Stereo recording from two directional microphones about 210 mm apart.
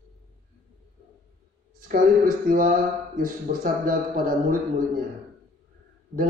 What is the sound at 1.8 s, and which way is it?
A man's voice, 40° right (ahead or behind).